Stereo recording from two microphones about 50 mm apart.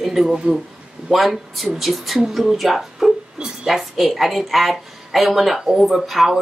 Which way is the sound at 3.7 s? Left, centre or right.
Centre.